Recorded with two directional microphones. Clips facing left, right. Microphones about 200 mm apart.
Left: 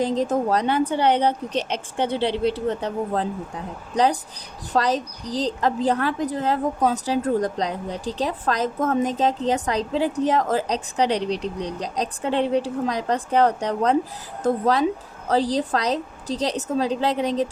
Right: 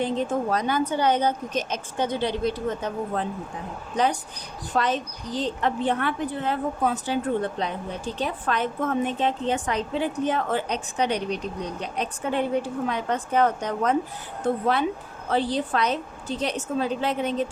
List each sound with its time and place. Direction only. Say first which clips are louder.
0.0 s a woman's voice: left 3 dB; 35° left (ahead or behind)